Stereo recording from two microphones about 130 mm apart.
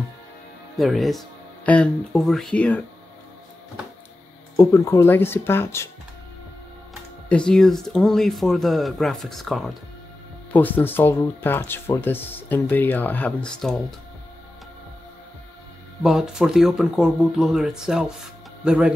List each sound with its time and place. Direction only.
0.7 s speech: centre (ahead or behind)
4.6 s speech: 20° left (ahead or behind)
7.2 s speech: 5° left (ahead or behind)
10.5 s speech: 15° left (ahead or behind)
16.0 s speech: 5° right (ahead or behind)